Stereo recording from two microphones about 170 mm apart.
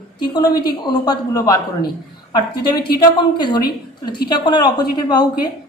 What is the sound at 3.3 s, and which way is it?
A woman's voice, 25° left (ahead or behind).